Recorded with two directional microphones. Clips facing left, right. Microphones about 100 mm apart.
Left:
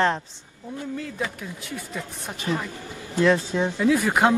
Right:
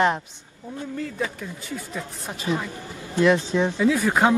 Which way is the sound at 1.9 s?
Centre (ahead or behind).